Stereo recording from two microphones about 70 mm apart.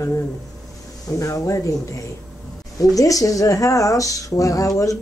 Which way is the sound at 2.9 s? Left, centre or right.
Left.